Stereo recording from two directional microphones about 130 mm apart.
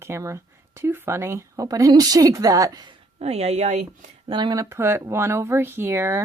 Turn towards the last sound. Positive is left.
turn(degrees=-20)  # may be behind; listen again after turning